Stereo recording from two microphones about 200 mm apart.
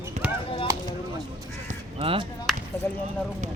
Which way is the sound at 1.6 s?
25° right (ahead or behind).